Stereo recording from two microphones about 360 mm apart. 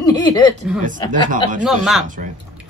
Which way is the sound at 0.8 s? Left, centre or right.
Right.